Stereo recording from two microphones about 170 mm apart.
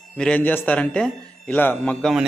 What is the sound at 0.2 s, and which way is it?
Speech, 5° left (ahead or behind).